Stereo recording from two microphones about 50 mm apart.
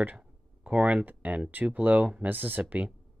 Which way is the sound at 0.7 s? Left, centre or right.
Right.